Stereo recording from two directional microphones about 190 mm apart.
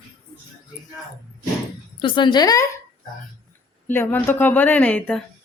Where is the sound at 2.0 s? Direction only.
25° left (ahead or behind).